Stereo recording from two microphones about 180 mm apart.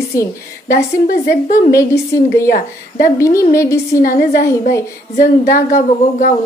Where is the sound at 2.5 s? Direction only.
50° left (ahead or behind).